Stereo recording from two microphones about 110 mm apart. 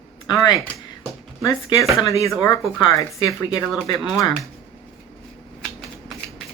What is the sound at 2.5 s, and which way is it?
Speech, 40° left (ahead or behind).